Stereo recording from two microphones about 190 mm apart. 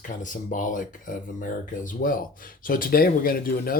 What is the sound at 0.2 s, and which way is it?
Speech, 45° left (ahead or behind).